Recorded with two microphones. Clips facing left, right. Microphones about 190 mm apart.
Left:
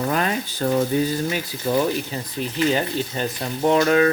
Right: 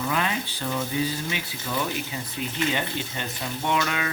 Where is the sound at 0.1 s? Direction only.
45° left (ahead or behind).